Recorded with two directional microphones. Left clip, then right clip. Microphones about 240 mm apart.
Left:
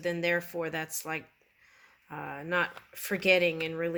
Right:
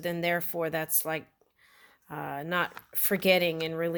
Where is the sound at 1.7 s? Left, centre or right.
Right.